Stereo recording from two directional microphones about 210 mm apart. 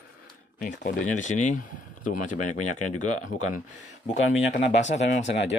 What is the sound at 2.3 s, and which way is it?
Speech, 90° left.